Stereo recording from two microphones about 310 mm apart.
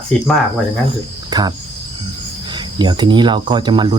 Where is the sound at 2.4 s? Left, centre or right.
Centre.